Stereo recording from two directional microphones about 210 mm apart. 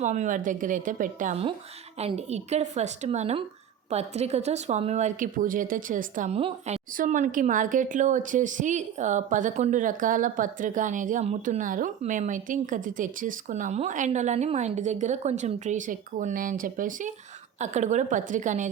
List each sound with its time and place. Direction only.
0.0 s speech: 35° right (ahead or behind)